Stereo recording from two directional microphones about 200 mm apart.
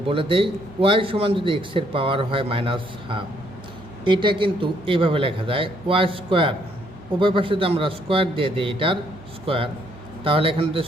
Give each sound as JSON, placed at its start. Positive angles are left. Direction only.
{"t": 0.1, "sound": "a man's voice", "side_deg": -25}
{"t": 10.2, "sound": "a man's voice", "side_deg": -25}